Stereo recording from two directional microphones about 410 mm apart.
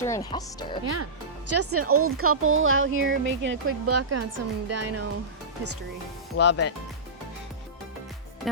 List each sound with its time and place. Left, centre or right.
0.0 s speech: centre
1.5 s speech: right
6.3 s speech: left